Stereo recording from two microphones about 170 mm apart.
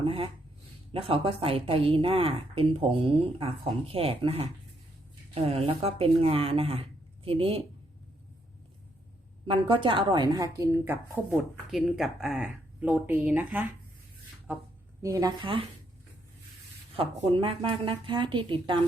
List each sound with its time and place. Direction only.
0.0 s a sound: 35° right (ahead or behind)
0.9 s speech: 35° right (ahead or behind)
9.5 s speech: 30° right (ahead or behind); by 11.3 s 15° right (ahead or behind)
11.7 s speech: centre (ahead or behind)
15.0 s speech: 20° right (ahead or behind)
16.9 s speech: 35° right (ahead or behind)